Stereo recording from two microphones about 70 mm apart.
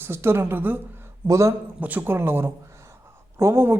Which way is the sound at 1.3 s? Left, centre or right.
Right.